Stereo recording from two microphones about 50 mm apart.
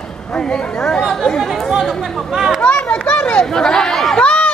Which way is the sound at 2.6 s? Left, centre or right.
Left.